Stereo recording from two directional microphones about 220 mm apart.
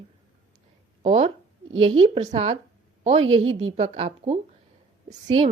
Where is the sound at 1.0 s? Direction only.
30° right (ahead or behind).